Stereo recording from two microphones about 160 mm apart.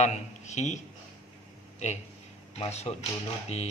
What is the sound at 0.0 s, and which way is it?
Speech, 45° left (ahead or behind).